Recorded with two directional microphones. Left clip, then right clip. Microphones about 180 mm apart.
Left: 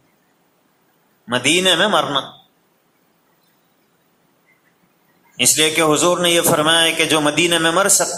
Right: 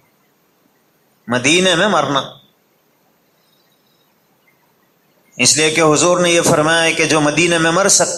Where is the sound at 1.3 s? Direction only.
20° right (ahead or behind).